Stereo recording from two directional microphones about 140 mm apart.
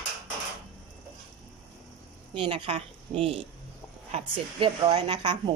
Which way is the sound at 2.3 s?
40° right (ahead or behind).